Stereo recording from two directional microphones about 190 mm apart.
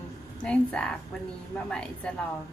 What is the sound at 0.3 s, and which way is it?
A woman's voice, 5° left (ahead or behind).